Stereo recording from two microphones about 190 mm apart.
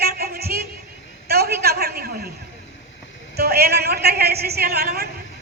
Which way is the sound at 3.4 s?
55° right (ahead or behind).